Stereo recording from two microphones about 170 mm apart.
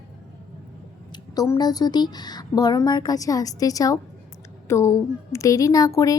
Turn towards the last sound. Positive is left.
turn(degrees=20)  # may be behind; listen again after turning